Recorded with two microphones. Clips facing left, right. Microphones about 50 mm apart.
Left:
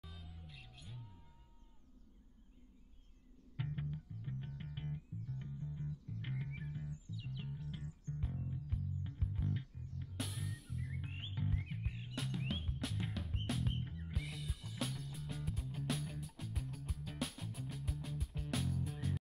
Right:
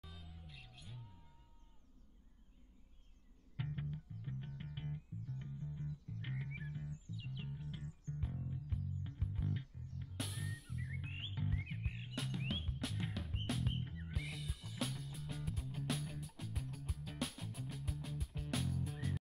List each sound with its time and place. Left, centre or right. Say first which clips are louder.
0.0 s music: left 1 dB; centre
3.5 s music: left 1 dB; centre
6.9 s music: left 1 dB; right
7.7 s music: left 1 dB; centre
11.1 s music: right 1 dB; centre
11.3 s music: left 2 dB; centre
11.9 s music: even; right
12.2 s music: left 1 dB; centre